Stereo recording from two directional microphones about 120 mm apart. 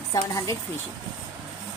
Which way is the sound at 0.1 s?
30° left (ahead or behind).